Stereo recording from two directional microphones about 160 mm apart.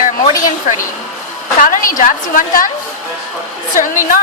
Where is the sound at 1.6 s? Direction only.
55° left (ahead or behind).